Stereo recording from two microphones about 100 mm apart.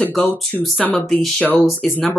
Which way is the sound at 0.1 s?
10° left (ahead or behind).